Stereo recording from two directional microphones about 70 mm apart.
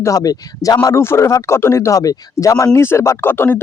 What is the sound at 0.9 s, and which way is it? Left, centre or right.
Speech, left.